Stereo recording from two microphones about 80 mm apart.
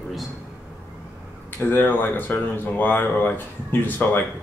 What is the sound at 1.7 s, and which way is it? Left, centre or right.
Speech, left.